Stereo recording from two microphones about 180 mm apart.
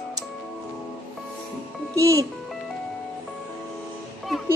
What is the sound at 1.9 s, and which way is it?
Speech, 15° right (ahead or behind).